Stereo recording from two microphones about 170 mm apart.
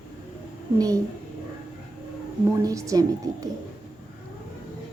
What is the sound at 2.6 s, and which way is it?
Speech, 20° right (ahead or behind).